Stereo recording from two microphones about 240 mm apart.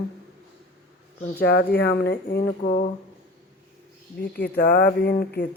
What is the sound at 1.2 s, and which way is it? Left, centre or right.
Speech, left.